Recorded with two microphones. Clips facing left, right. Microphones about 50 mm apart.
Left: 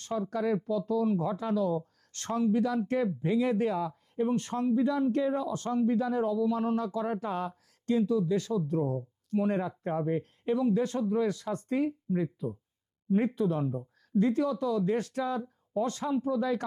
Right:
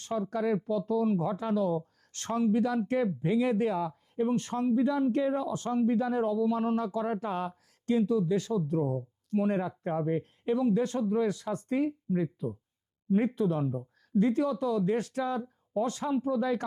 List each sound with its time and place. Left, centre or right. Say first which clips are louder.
0.0 s speech: even; centre
2.6 s speech: even; centre
6.9 s speech: even; centre
8.2 s speech: even; centre
16.0 s speech: even; centre